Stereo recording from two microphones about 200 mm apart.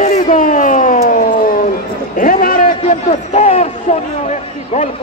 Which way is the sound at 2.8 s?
30° left (ahead or behind).